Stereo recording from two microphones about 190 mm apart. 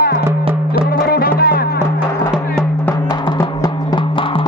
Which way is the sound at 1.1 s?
55° left (ahead or behind).